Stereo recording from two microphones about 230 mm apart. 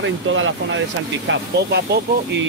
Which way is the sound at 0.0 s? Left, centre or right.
Right.